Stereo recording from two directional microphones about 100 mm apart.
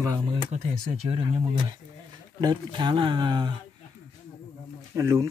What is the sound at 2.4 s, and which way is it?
Speech, 50° right (ahead or behind).